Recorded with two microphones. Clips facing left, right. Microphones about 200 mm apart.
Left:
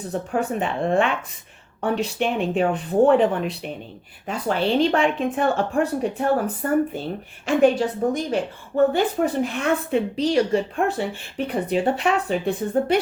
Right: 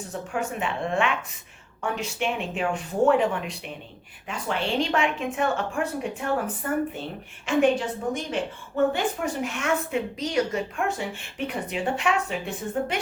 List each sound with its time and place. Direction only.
0.1 s a woman's voice: 35° left (ahead or behind)